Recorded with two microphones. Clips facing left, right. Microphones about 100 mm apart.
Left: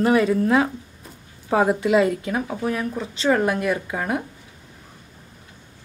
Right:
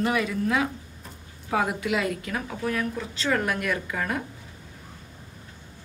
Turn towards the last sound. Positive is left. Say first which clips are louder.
# left 4 dB
turn(degrees=25)  # may be behind; listen again after turning